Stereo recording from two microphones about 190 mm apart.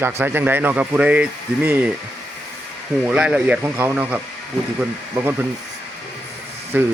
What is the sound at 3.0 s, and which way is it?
Speech, 5° right (ahead or behind).